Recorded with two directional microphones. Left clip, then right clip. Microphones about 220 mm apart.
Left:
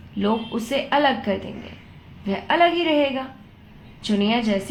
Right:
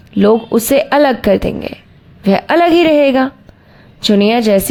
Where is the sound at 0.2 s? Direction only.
50° right (ahead or behind).